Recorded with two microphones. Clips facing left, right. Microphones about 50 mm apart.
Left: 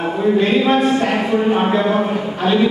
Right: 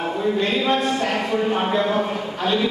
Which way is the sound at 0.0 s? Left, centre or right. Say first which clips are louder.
Left 5 dB; centre.